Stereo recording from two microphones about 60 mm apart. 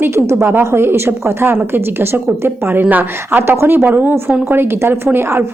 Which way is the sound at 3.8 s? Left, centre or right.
Right.